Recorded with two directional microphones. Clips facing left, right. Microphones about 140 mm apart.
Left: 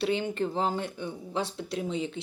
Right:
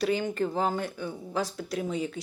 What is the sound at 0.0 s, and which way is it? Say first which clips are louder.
Speech: right 1 dB; 25° left (ahead or behind).